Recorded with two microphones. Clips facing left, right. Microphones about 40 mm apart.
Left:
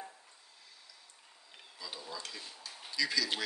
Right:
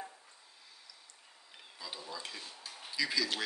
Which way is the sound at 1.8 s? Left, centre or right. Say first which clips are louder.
Even; centre.